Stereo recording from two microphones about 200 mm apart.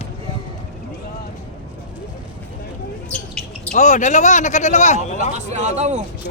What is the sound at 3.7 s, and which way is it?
Speech, 35° left (ahead or behind).